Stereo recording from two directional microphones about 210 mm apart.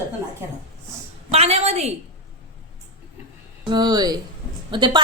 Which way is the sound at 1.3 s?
30° right (ahead or behind).